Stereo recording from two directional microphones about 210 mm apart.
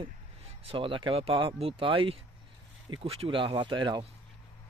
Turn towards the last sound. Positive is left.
turn(degrees=-20)  # may be behind; listen again after turning